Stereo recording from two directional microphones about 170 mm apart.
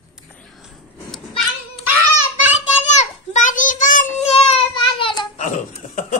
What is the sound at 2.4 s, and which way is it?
Child singing, 45° left (ahead or behind).